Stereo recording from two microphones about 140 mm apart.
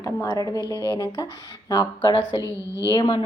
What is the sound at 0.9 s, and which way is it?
A woman's voice, 25° left (ahead or behind).